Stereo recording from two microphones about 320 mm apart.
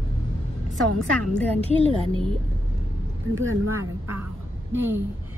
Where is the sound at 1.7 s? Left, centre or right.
Centre.